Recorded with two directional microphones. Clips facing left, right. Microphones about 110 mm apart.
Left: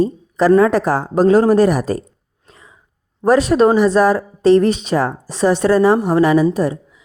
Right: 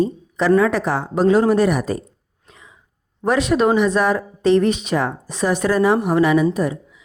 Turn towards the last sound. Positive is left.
turn(degrees=35)  # may be behind; listen again after turning